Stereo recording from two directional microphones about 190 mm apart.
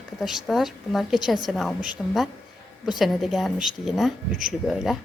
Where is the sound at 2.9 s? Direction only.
Centre (ahead or behind).